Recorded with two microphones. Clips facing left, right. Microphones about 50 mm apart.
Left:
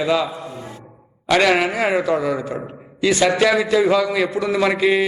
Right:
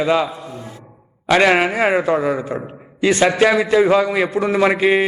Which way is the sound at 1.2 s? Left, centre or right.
Right.